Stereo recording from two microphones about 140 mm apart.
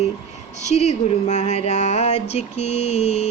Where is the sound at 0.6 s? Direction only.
55° left (ahead or behind).